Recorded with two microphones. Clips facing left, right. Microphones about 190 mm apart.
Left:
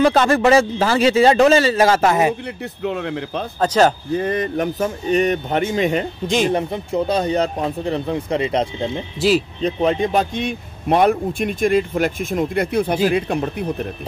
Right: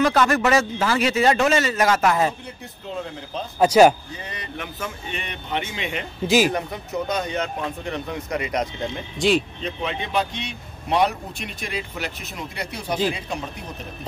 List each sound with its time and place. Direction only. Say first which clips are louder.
0.0 s a man's voice: left 4 dB; 30° left (ahead or behind)
2.4 s speech: left 11 dB; 70° left (ahead or behind)
3.5 s speech: right 2 dB; 10° right (ahead or behind)
4.1 s speech: left 15 dB; 50° left (ahead or behind)
6.2 s speech: right 2 dB; 5° right (ahead or behind)
6.5 s speech: left 6 dB; 30° left (ahead or behind)
9.6 s speech: left 10 dB; 40° left (ahead or behind); by 13.7 s 60° left (ahead or behind)